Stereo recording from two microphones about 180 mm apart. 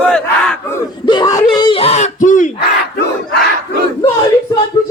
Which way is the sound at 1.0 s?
25° left (ahead or behind).